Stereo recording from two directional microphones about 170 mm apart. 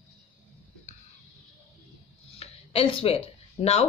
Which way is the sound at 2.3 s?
35° left (ahead or behind).